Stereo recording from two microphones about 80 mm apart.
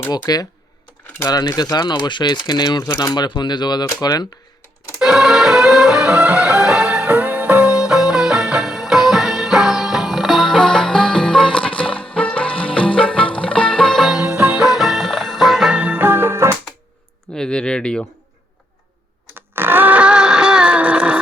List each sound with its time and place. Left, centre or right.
0.1 s speech: left
4.9 s music: centre
14.2 s music: centre
15.8 s music: right
17.3 s speech: centre
19.4 s a sound: right